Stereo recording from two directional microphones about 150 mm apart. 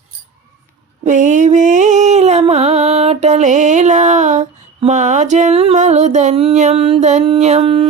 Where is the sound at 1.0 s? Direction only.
55° right (ahead or behind).